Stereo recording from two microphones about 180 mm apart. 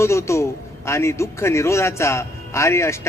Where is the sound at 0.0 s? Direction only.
15° left (ahead or behind).